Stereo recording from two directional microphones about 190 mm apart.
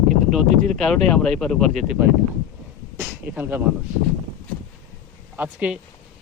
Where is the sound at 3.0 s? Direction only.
10° right (ahead or behind).